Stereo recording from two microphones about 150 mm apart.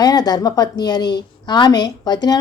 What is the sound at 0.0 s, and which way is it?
Speech, 25° left (ahead or behind).